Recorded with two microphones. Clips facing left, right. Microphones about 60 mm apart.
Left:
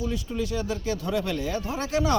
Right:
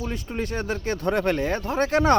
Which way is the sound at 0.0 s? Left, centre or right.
Right.